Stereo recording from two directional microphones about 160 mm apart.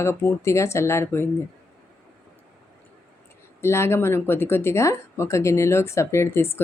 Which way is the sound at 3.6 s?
15° left (ahead or behind).